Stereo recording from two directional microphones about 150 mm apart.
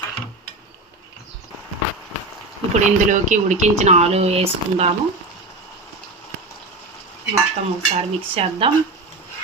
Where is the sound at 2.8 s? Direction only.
55° right (ahead or behind).